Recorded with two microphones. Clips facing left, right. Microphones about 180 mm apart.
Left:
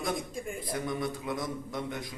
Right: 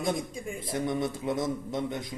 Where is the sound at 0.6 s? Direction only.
25° right (ahead or behind).